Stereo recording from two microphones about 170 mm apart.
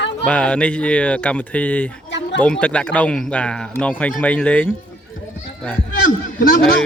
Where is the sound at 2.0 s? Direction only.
90° left.